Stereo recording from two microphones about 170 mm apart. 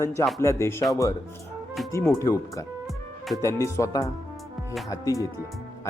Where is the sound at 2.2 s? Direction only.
20° left (ahead or behind).